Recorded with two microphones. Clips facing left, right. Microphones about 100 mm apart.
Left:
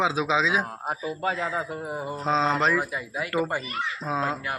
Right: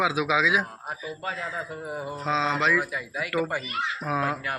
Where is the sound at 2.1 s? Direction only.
35° left (ahead or behind).